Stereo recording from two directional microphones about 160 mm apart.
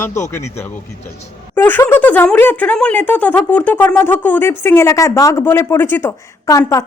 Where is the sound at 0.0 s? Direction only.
15° left (ahead or behind).